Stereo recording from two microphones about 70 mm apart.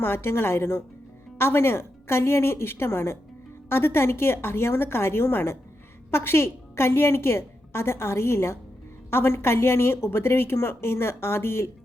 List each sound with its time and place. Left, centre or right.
0.0 s a woman's voice: left